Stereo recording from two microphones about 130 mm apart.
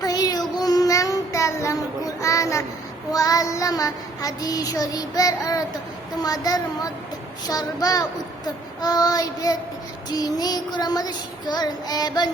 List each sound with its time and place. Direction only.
0.0 s child singing: 30° left (ahead or behind)